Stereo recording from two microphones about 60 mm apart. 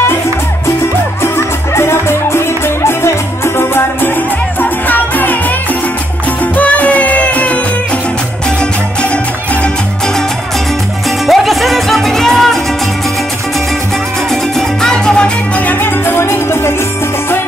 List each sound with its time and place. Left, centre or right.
1.2 s music: left
4.6 s music: left
6.4 s music: left
11.1 s music: centre
14.3 s music: centre; by 16.7 s left